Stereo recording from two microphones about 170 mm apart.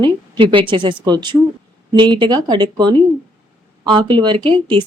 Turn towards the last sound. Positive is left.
turn(degrees=-30)  # may be behind; listen again after turning